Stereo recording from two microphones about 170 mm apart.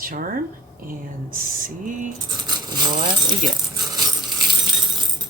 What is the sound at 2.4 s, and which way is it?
Speech, 25° right (ahead or behind).